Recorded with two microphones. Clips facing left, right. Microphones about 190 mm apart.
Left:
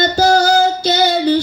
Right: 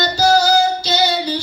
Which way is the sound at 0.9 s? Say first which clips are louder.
Left 4 dB; 55° left (ahead or behind).